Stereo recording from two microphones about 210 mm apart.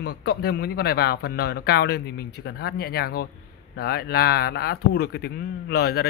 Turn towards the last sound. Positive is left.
turn(degrees=50)  # may be behind; listen again after turning